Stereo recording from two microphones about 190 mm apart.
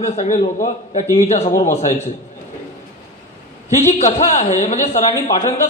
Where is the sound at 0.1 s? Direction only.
35° left (ahead or behind).